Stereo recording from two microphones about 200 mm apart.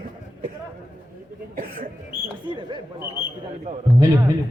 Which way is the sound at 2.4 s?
25° right (ahead or behind).